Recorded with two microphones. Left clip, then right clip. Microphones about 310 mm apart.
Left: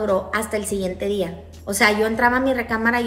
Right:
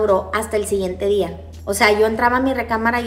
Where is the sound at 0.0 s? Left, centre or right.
Centre.